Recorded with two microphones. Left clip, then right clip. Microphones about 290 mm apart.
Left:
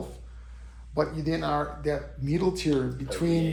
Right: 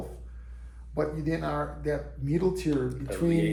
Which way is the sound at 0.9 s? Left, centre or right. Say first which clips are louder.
Left 2 dB; left.